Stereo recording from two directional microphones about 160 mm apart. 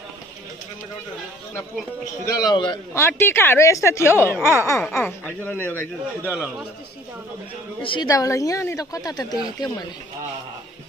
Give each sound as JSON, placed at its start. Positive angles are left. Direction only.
{"t": 2.2, "sound": "a woman's voice", "side_deg": 25}
{"t": 3.0, "sound": "a woman's voice", "side_deg": 15}
{"t": 6.2, "sound": "a man's voice", "side_deg": -10}
{"t": 7.8, "sound": "a woman's voice", "side_deg": 30}
{"t": 8.1, "sound": "a woman's voice", "side_deg": 20}